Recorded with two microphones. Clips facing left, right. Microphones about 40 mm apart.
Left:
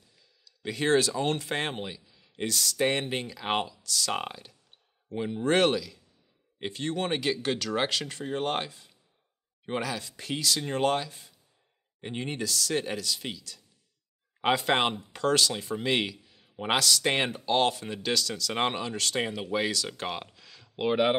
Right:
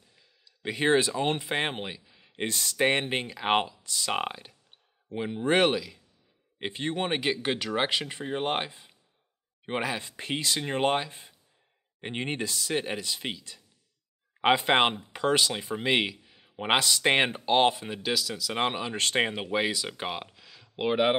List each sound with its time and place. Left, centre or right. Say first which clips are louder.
0.1 s speech: right 1 dB; right; by 18.8 s centre
18.9 s speech: right 3 dB; right
19.4 s speech: right 1 dB; centre